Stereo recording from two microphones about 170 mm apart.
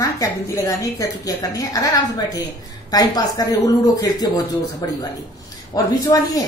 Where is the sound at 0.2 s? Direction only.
20° left (ahead or behind).